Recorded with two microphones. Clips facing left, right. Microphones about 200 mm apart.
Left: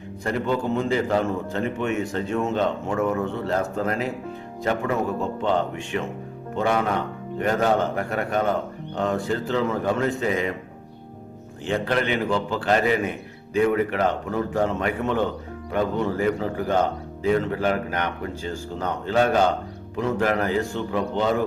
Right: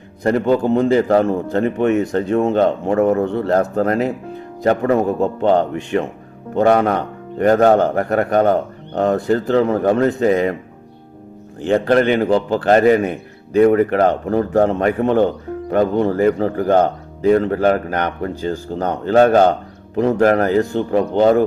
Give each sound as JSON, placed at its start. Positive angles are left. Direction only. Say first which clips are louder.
{"t": 0.2, "sound": "a man's voice", "louder": "right 9 dB", "side_deg": -40}
{"t": 7.5, "sound": "a man's voice", "louder": "right 9 dB", "side_deg": -55}
{"t": 11.6, "sound": "a man's voice", "louder": "right 9 dB", "side_deg": -40}
{"t": 13.5, "sound": "a man's voice", "louder": "right 8 dB", "side_deg": -35}
{"t": 20.0, "sound": "a man's voice", "louder": "right 9 dB", "side_deg": -40}